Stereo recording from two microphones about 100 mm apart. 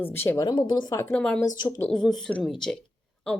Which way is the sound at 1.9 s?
5° left (ahead or behind).